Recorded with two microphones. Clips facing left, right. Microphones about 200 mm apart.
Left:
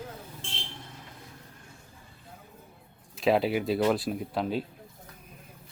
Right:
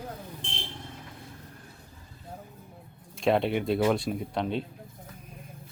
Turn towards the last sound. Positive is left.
turn(degrees=5)  # may be behind; listen again after turning